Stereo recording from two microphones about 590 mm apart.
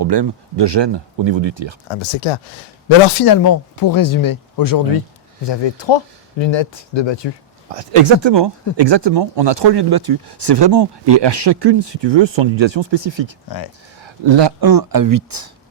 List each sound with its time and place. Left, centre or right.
0.0 s speech: right
1.9 s speech: left
3.2 s speech: left
7.7 s speech: right